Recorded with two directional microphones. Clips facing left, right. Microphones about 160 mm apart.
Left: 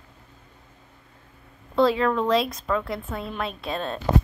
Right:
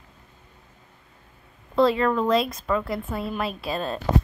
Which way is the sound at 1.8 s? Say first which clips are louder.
Even; centre (ahead or behind).